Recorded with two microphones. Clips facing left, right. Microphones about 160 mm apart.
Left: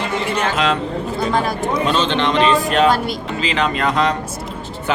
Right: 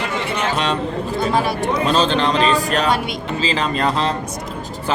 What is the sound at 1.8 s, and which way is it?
A man's voice, 35° right (ahead or behind).